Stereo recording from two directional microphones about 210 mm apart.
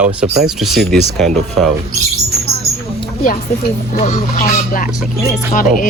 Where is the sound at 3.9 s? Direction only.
30° left (ahead or behind).